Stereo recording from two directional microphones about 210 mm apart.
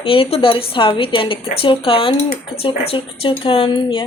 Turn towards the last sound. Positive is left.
turn(degrees=25)  # may be behind; listen again after turning